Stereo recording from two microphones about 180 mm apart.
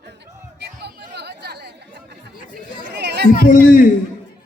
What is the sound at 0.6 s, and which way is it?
Chatter, 70° right (ahead or behind).